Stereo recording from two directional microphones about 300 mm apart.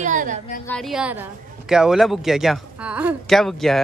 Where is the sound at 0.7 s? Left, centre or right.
Centre.